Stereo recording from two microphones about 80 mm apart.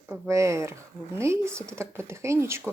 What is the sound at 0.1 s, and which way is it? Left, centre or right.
Speech, right.